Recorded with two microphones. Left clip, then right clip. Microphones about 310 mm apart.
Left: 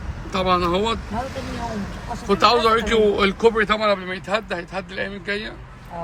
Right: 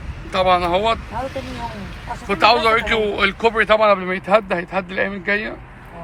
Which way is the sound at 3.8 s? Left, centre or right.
Centre.